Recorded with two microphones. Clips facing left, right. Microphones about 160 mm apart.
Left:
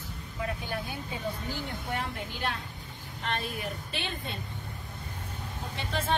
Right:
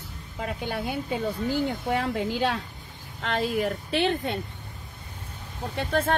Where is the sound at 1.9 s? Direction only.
90° right.